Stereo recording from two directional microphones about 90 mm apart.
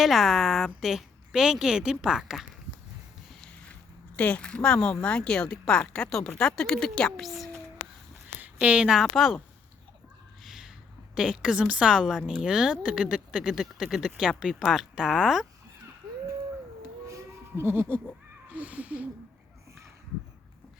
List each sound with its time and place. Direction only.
0.0 s a woman's voice: centre (ahead or behind)
4.2 s speech: 15° left (ahead or behind)
8.4 s a woman's voice: 15° right (ahead or behind)
10.4 s a sound: 5° right (ahead or behind)
11.1 s speech: 10° right (ahead or behind)
17.1 s goat: 30° right (ahead or behind)
18.4 s speech: 15° right (ahead or behind)